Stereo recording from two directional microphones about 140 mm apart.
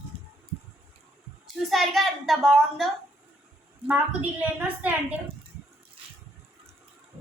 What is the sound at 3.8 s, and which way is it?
A woman's voice, 10° right (ahead or behind).